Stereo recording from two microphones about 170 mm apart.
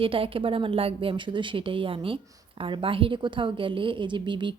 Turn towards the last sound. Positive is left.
turn(degrees=-30)  # may be behind; listen again after turning